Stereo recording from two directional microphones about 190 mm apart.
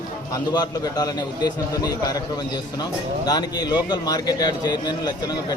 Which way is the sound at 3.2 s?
20° left (ahead or behind).